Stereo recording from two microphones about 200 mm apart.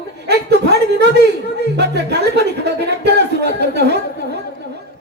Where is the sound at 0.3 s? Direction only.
55° right (ahead or behind).